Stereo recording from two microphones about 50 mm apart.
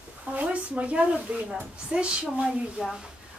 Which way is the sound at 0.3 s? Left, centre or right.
Right.